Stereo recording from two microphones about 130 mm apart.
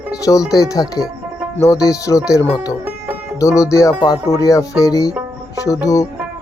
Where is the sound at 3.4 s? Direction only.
25° left (ahead or behind).